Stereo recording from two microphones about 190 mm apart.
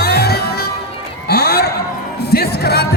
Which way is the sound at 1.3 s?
55° left (ahead or behind).